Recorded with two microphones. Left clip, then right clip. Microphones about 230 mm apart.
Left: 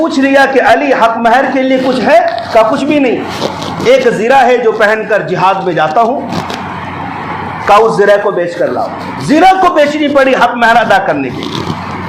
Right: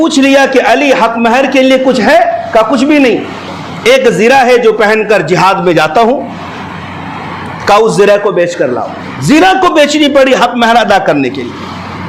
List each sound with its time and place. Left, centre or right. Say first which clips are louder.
0.0 s a man's voice: right 1 dB; right
7.7 s a man's voice: even; right
9.3 s a man's voice: even; right